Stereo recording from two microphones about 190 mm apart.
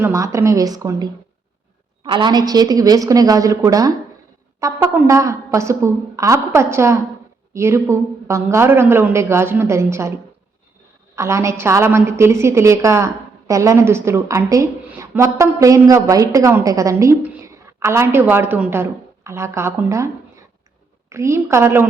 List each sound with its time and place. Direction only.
0.0 s a woman's voice: 15° right (ahead or behind)
11.1 s a woman's voice: 15° right (ahead or behind)
21.1 s a woman's voice: 15° right (ahead or behind)